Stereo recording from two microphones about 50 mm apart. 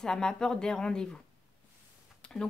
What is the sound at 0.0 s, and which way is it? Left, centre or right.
Speech, centre.